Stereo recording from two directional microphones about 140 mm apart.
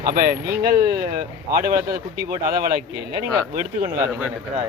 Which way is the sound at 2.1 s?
20° right (ahead or behind).